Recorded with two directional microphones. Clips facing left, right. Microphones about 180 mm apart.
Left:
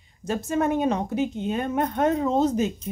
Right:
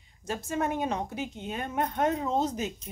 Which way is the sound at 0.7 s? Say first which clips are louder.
Left 7 dB; 25° left (ahead or behind).